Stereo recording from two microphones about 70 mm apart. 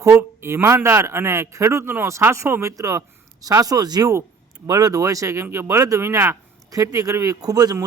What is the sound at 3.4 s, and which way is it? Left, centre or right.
Speech, right.